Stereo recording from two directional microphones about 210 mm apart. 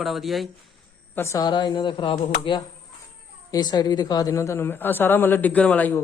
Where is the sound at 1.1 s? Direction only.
15° left (ahead or behind).